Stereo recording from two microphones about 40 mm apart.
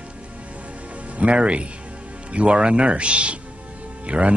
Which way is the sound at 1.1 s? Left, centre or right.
Right.